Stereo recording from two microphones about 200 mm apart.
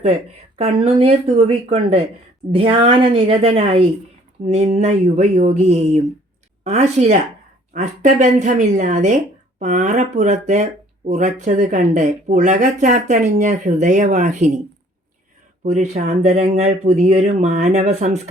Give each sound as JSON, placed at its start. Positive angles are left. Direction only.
{"t": 0.6, "sound": "a woman's voice", "side_deg": -30}
{"t": 15.6, "sound": "speech", "side_deg": -35}